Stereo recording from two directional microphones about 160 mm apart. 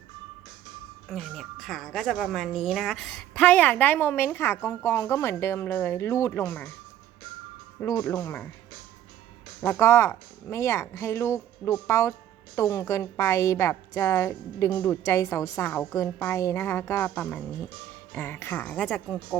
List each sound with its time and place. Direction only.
1.0 s speech: centre (ahead or behind)
7.8 s speech: 15° left (ahead or behind)
9.6 s speech: 15° left (ahead or behind)